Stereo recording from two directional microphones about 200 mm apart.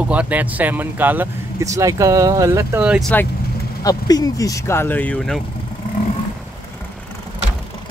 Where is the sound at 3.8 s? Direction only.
20° left (ahead or behind).